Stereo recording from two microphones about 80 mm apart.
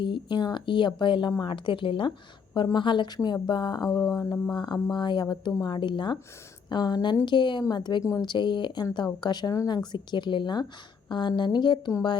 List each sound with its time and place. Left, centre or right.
0.0 s a woman's voice: left
2.7 s speech: left
3.2 s speech: left
4.1 s a sound: left
4.5 s speech: left
6.7 s speech: left
7.3 s speech: left
7.7 s speech: left